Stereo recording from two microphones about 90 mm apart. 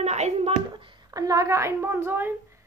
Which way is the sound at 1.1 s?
40° right (ahead or behind).